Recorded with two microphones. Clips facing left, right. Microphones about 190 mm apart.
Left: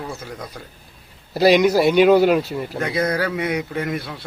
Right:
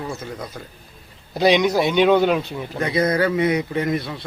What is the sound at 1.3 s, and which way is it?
Speech, 5° left (ahead or behind).